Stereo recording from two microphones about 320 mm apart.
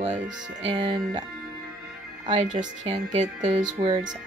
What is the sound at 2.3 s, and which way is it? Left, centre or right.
Speech, centre.